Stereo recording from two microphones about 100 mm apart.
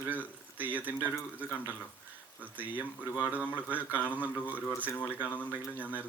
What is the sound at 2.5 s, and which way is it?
Speech, 15° right (ahead or behind).